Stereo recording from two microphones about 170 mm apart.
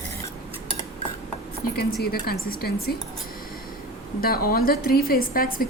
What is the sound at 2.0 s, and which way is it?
Speech, 65° left (ahead or behind).